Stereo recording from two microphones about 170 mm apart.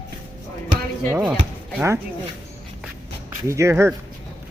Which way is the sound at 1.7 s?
15° right (ahead or behind).